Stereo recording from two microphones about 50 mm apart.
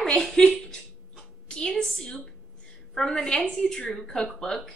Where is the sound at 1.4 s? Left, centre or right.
Centre.